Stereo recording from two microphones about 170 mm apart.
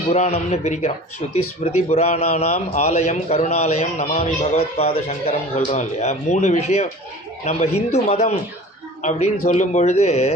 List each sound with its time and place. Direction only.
0.1 s speech: 40° left (ahead or behind)